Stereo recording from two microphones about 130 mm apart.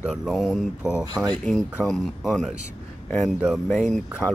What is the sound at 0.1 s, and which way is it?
Speech, centre (ahead or behind).